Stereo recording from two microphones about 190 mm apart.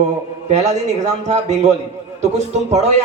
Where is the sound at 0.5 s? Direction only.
35° right (ahead or behind).